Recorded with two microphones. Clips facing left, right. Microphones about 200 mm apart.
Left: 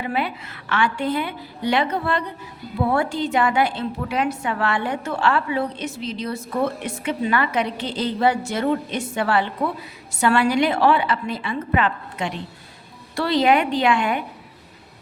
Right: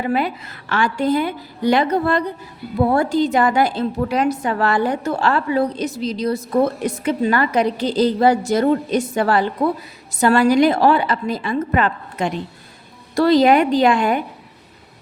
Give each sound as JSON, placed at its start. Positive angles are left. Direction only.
{"t": 0.0, "sound": "a woman's voice", "side_deg": -40}